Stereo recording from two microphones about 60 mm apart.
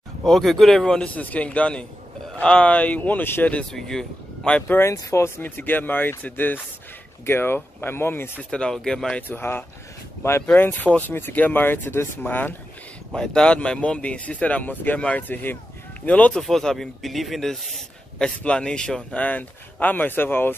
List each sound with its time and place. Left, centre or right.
0.2 s a man's voice: centre
1.1 s speech: left
3.7 s speech: centre
4.6 s speech: left
4.9 s speech: left
5.4 s speech: left
8.5 s speech: centre
9.3 s speech: left
13.1 s speech: centre; by 15.0 s left
15.0 s speech: centre
15.2 s speech: left
16.3 s a man's voice: centre
19.2 s speech: left